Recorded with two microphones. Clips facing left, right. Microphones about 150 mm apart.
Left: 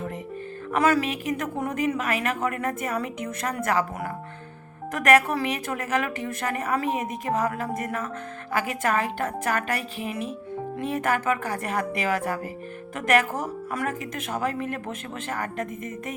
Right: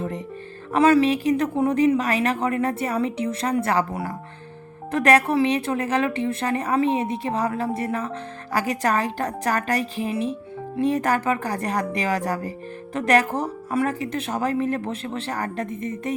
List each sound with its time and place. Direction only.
0.7 s a woman's voice: 30° right (ahead or behind)